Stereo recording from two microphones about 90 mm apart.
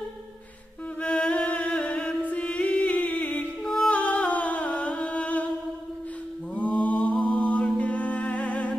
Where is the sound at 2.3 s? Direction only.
15° left (ahead or behind).